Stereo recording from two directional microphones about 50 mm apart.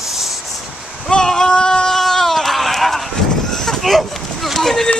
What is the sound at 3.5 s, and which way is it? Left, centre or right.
Vehicle, centre.